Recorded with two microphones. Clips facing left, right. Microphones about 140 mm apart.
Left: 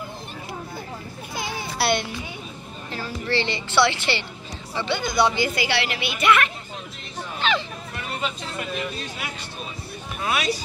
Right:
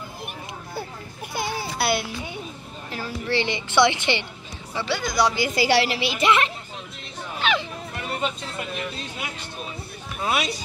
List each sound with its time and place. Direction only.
1.3 s a sound: 5° right (ahead or behind)
2.9 s a woman's voice: 15° right (ahead or behind)
4.7 s speech: 5° right (ahead or behind)
5.5 s a woman's voice: 35° right (ahead or behind)
7.3 s hubbub: 5° right (ahead or behind)
10.2 s speech: 25° right (ahead or behind)